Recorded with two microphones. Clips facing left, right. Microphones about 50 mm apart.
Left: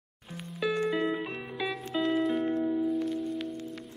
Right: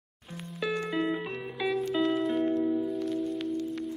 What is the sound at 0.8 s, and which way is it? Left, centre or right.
Music, centre.